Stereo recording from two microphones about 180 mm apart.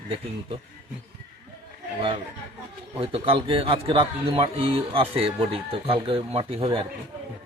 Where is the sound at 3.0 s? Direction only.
30° right (ahead or behind).